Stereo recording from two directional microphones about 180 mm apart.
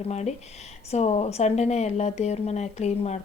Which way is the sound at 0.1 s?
40° left (ahead or behind).